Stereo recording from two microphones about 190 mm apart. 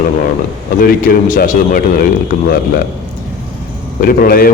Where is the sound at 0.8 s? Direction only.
50° left (ahead or behind).